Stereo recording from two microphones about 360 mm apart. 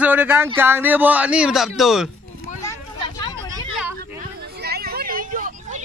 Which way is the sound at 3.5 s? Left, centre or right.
Centre.